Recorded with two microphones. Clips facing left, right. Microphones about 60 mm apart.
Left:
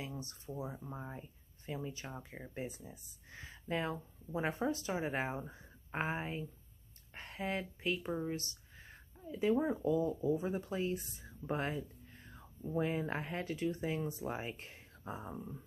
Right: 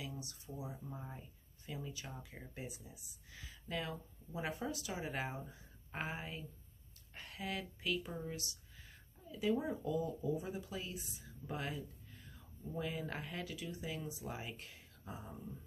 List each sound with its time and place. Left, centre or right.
0.0 s a sound: left
0.6 s speech: left
11.4 s speech: left